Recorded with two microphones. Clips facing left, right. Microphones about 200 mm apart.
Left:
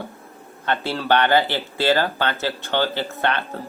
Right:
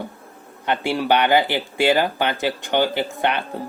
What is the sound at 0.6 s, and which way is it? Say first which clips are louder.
Speech: right 3 dB; 15° right (ahead or behind).